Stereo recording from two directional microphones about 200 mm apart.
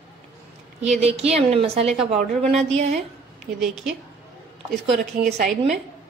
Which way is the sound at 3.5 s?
Centre (ahead or behind).